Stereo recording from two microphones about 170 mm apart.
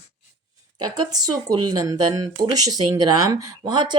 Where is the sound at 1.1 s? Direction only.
20° right (ahead or behind).